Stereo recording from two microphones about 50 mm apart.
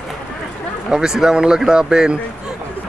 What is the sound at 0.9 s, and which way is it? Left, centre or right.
Speech, centre.